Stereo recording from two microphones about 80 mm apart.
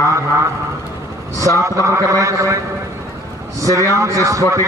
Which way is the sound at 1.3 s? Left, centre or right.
Right.